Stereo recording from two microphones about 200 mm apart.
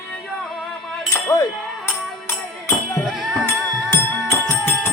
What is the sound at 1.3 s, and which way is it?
Chink, 15° left (ahead or behind).